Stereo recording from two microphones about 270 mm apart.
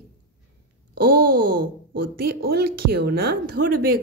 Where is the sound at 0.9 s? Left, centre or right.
Right.